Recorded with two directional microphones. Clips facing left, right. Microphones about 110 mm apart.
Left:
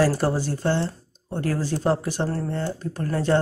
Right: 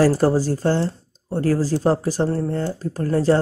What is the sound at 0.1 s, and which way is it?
Speech, 40° right (ahead or behind).